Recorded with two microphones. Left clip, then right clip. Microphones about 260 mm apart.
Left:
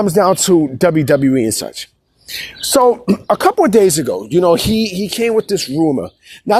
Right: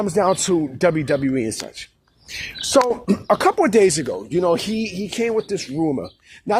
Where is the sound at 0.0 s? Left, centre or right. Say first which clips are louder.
Left 6 dB; left.